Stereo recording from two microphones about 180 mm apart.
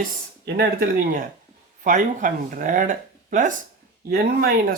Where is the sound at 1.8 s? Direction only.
45° right (ahead or behind).